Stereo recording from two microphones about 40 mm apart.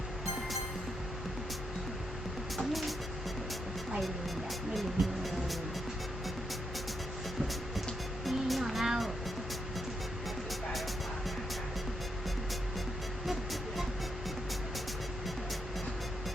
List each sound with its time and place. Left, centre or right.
4.7 s speech: centre
8.2 s music: centre
13.2 s music: centre